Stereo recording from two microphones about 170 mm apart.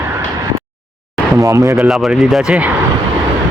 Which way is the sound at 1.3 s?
20° right (ahead or behind).